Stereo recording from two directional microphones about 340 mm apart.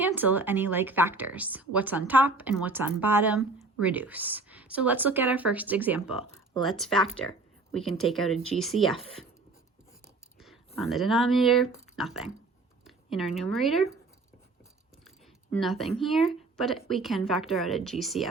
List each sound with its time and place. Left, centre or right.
0.0 s speech: centre
10.8 s speech: centre
15.5 s speech: centre